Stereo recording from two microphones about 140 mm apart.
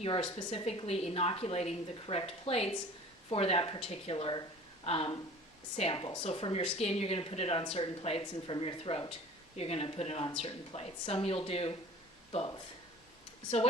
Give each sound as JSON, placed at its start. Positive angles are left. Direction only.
{"t": 0.0, "sound": "a woman's voice", "side_deg": 40}